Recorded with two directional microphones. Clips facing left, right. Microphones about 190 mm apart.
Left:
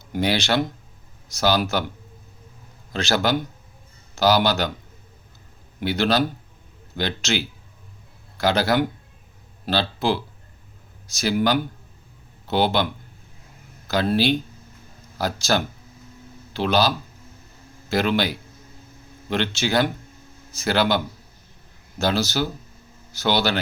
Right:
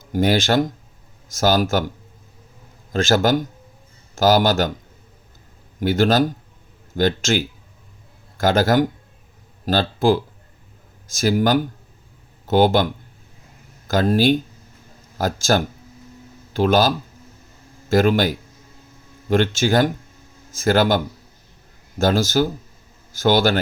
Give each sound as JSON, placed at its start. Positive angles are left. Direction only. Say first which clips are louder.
{"t": 0.0, "sound": "a man's voice", "louder": "right 5 dB", "side_deg": -45}
{"t": 2.9, "sound": "a man's voice", "louder": "right 5 dB", "side_deg": -45}
{"t": 5.8, "sound": "a man's voice", "louder": "right 4 dB", "side_deg": -45}